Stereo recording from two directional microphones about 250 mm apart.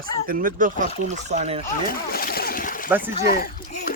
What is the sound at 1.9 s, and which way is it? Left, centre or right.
Splash, left.